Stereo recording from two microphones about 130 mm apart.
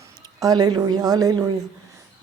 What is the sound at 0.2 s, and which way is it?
Speech, 30° right (ahead or behind).